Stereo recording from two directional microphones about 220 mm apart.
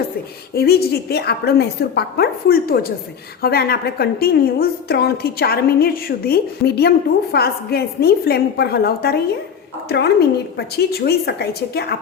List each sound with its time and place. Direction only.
0.5 s a woman's voice: 45° left (ahead or behind)